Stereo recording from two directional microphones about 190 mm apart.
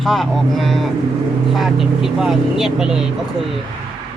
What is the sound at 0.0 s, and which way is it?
Speech, centre (ahead or behind).